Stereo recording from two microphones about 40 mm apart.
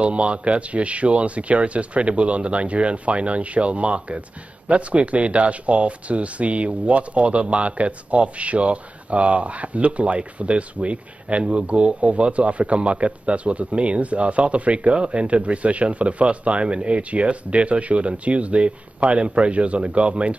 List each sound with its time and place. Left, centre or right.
0.0 s speech: right